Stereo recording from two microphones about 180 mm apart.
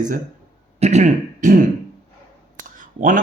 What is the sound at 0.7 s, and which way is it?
Speech, 35° right (ahead or behind).